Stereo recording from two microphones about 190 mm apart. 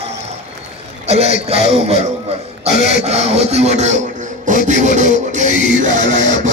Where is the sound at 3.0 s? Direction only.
35° right (ahead or behind).